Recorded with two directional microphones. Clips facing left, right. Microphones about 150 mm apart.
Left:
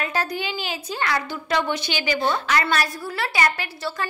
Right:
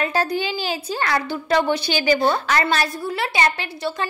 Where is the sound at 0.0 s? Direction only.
30° right (ahead or behind).